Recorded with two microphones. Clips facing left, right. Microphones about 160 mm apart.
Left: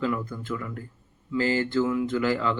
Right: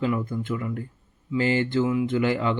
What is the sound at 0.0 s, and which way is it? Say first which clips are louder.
Speech: right 3 dB; 20° right (ahead or behind).